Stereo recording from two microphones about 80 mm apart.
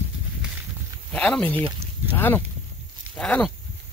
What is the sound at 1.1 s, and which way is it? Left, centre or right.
Speech, centre.